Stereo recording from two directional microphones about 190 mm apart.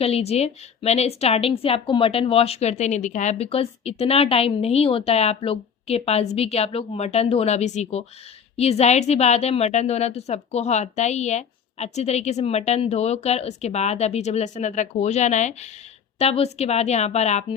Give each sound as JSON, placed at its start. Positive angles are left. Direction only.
{"t": 0.0, "sound": "a woman's voice", "side_deg": 35}